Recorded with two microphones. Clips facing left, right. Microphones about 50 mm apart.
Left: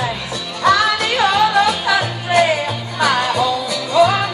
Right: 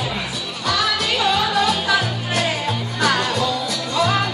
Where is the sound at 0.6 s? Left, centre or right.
Left.